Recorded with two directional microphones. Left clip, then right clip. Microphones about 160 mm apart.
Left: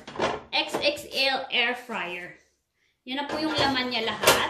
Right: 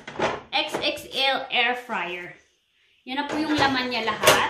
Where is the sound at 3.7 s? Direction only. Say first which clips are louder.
Right 1 dB; 20° right (ahead or behind).